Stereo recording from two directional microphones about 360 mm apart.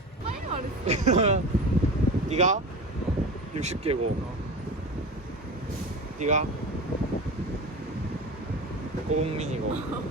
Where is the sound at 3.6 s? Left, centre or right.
Centre.